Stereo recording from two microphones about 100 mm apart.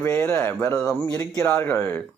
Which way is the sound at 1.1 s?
30° left (ahead or behind).